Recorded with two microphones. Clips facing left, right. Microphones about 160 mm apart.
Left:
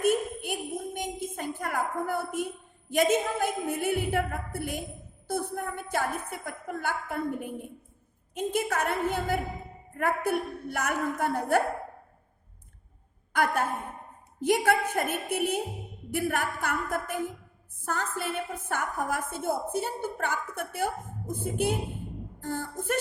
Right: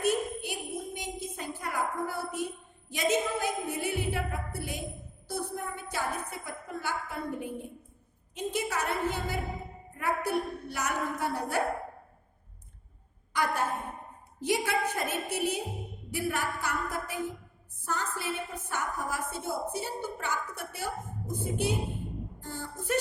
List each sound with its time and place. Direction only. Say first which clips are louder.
0.0 s jingle bell: left 3 dB; 50° left (ahead or behind)
2.9 s a woman's voice: left 4 dB; 50° left (ahead or behind)
13.3 s a woman's voice: left 3 dB; 55° left (ahead or behind)